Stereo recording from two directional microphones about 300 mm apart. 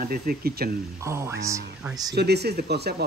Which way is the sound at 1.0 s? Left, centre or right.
Centre.